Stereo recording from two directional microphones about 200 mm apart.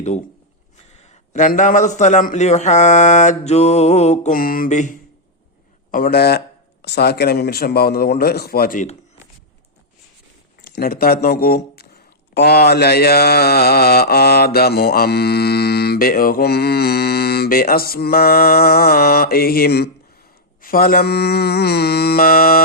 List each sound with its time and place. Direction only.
1.0 s a man's voice: 40° left (ahead or behind)
5.9 s mantra: 50° left (ahead or behind)
10.6 s speech: 50° left (ahead or behind)
12.3 s mantra: 55° left (ahead or behind)